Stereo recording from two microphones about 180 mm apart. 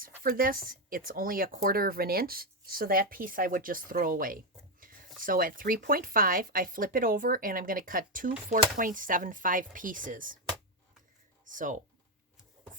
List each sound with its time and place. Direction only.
0.0 s speech: 55° right (ahead or behind)
11.4 s speech: 45° right (ahead or behind)